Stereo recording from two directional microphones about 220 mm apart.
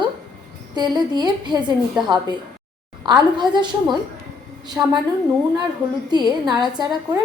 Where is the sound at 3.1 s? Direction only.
20° right (ahead or behind).